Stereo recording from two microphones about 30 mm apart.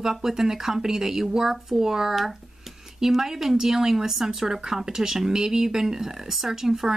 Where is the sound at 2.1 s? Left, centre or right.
Centre.